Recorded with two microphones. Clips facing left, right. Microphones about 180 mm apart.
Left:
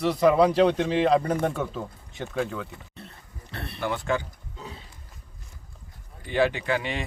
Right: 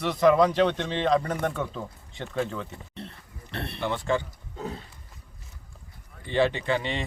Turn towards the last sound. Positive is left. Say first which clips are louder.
# even
turn(degrees=5)  # may be behind; listen again after turning